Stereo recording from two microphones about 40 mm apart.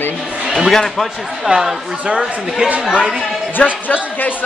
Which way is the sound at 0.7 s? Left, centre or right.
Centre.